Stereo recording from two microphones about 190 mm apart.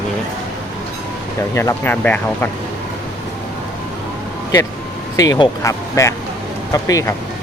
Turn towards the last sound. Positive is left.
turn(degrees=20)  # may be behind; listen again after turning